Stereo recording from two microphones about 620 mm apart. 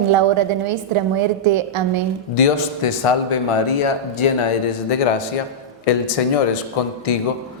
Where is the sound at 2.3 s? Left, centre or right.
Left.